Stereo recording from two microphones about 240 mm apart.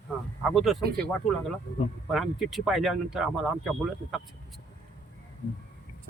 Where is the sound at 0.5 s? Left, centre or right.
Centre.